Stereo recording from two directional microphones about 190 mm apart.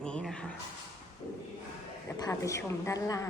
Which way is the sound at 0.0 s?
5° left (ahead or behind).